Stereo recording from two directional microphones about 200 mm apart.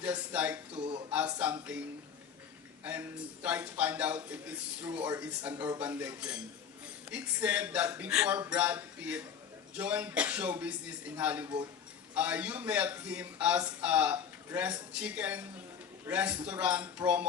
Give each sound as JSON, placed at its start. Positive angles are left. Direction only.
{"t": 0.0, "sound": "a man's voice", "side_deg": -5}
{"t": 0.7, "sound": "speech", "side_deg": -25}
{"t": 1.1, "sound": "a man's voice", "side_deg": -5}
{"t": 2.8, "sound": "a man's voice", "side_deg": -5}
{"t": 11.4, "sound": "speech", "side_deg": -20}
{"t": 12.1, "sound": "a man's voice", "side_deg": -5}